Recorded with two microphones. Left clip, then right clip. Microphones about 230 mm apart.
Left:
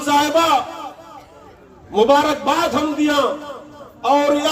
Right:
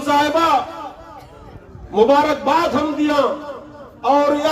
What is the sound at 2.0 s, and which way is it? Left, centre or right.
A man's voice, left.